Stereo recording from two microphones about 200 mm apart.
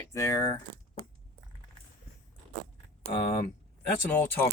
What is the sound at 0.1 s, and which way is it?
Speech, 15° left (ahead or behind).